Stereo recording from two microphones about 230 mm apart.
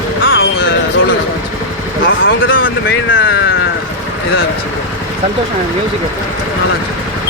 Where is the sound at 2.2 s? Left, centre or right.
Left.